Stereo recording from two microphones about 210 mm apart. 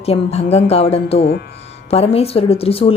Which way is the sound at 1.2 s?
50° left (ahead or behind).